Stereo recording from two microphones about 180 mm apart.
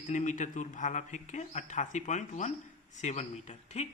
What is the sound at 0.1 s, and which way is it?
A man's voice, 45° left (ahead or behind).